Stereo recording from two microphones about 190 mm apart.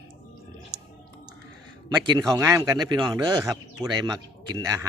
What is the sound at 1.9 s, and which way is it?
Speech, 20° right (ahead or behind).